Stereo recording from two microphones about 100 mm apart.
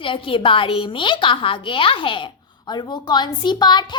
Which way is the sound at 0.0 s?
60° left (ahead or behind).